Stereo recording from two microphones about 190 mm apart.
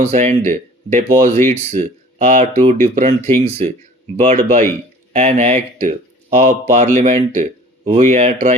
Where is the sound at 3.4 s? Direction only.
35° right (ahead or behind).